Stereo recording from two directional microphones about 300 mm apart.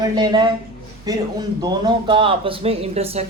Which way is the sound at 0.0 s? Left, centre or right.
Centre.